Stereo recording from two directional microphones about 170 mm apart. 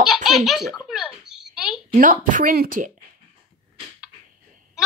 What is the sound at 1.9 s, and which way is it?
Speech, 50° right (ahead or behind).